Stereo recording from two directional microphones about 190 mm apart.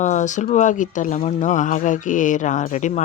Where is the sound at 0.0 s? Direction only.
40° left (ahead or behind).